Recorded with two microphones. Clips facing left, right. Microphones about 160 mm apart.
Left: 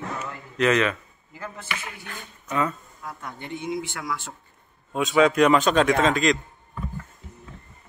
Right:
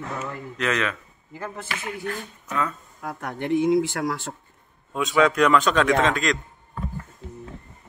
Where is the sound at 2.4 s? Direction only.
5° left (ahead or behind).